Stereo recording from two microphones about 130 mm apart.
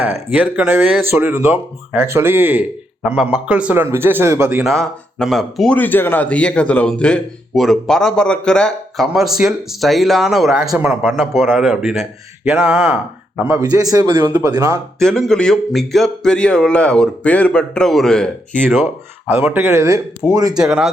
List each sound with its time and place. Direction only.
0.0 s speech: 15° right (ahead or behind)
4.6 s a man's voice: centre (ahead or behind)
5.7 s a man's voice: 15° left (ahead or behind); by 10.8 s 5° right (ahead or behind)
10.8 s speech: 15° right (ahead or behind)
11.1 s a man's voice: centre (ahead or behind)
13.6 s a man's voice: 30° right (ahead or behind)
14.9 s a man's voice: 5° left (ahead or behind)
19.3 s speech: 15° right (ahead or behind)
20.2 s a man's voice: centre (ahead or behind)